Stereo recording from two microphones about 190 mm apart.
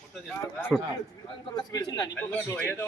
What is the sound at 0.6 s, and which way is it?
A man's voice, 10° left (ahead or behind).